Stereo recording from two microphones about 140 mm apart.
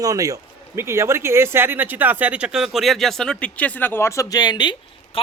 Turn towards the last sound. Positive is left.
turn(degrees=40)  # may be behind; listen again after turning